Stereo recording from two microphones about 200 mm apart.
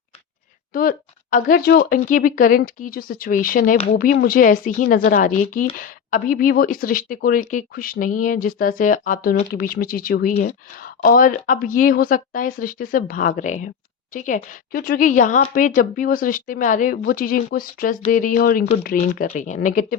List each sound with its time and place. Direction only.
0.7 s a woman's voice: 45° left (ahead or behind)